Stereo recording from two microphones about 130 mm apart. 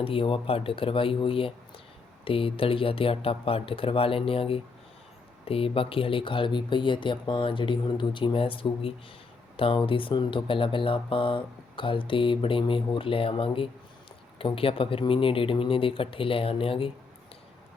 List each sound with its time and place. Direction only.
0.0 s speech: 45° left (ahead or behind)